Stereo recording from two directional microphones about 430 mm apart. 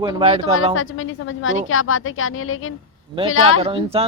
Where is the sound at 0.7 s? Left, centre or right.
Left.